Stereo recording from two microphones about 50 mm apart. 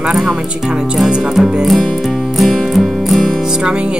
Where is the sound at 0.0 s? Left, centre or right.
Centre.